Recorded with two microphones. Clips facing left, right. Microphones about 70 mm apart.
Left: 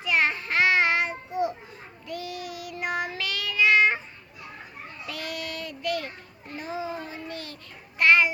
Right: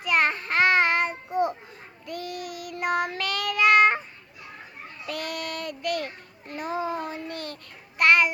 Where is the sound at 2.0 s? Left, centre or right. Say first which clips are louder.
Right 1 dB; right.